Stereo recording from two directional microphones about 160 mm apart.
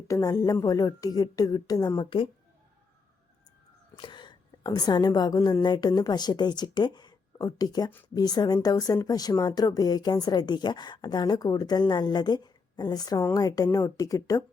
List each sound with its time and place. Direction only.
0.1 s speech: 25° left (ahead or behind)
3.9 s a woman's voice: 30° left (ahead or behind)